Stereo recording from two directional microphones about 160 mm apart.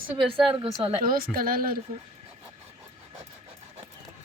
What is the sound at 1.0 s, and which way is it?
Speech, 65° right (ahead or behind).